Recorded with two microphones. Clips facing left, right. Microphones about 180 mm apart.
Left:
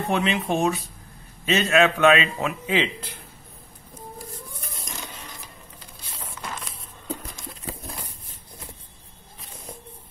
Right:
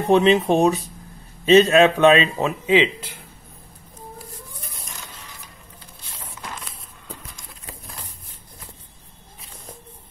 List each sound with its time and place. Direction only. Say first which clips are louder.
0.1 s a man's voice: right 9 dB; 30° right (ahead or behind)
2.6 s speech: right 8 dB; 15° right (ahead or behind)